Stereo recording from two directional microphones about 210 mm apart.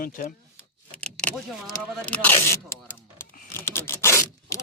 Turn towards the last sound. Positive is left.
turn(degrees=15)  # may be behind; listen again after turning